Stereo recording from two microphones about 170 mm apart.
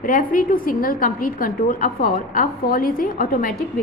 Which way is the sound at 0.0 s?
55° left (ahead or behind).